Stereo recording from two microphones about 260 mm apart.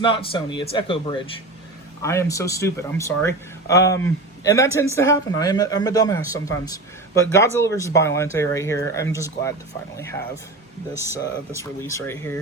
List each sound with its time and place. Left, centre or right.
0.0 s a man's voice: centre
10.9 s speech: centre
11.2 s speech: centre